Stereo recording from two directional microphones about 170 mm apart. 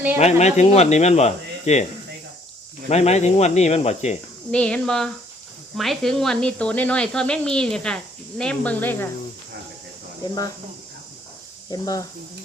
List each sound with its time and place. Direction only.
0.2 s speech: 40° left (ahead or behind)
2.9 s speech: 40° left (ahead or behind)
4.5 s speech: 5° left (ahead or behind)
10.2 s speech: 20° left (ahead or behind)
11.7 s speech: 20° left (ahead or behind)